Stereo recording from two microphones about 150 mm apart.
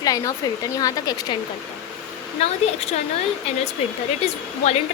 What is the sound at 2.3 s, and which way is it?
Speech, 45° left (ahead or behind).